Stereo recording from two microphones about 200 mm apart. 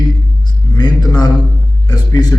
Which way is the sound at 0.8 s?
20° left (ahead or behind).